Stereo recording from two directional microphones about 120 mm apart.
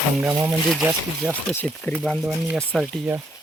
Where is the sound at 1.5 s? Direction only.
15° left (ahead or behind).